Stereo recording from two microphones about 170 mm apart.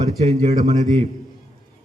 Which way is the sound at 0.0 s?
40° right (ahead or behind).